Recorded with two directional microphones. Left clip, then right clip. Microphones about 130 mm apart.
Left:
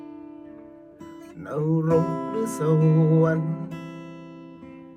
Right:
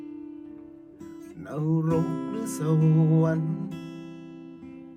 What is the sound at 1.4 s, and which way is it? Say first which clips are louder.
Music: left 4 dB; 20° right (ahead or behind).